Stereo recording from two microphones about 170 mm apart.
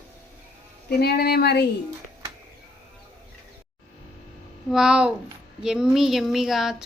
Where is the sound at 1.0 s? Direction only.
70° left (ahead or behind).